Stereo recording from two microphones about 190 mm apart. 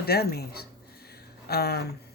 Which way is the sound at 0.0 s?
55° left (ahead or behind).